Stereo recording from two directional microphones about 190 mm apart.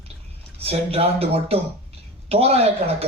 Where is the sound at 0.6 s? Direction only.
30° right (ahead or behind).